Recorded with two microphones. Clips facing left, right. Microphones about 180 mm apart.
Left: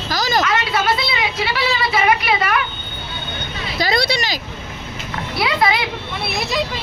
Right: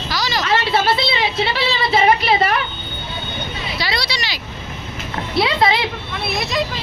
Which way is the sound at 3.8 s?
45° left (ahead or behind).